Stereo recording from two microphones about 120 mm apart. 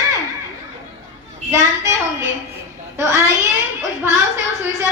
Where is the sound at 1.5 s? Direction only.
25° right (ahead or behind).